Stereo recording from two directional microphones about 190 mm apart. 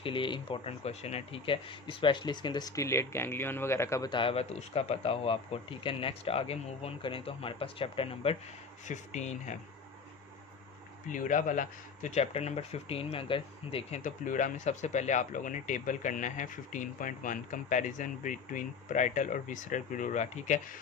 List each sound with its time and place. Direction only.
0.0 s speech: 25° left (ahead or behind)
11.1 s speech: 40° left (ahead or behind)